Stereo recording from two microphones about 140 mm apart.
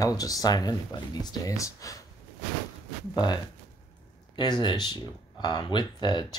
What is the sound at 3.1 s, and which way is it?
Speech, 30° left (ahead or behind).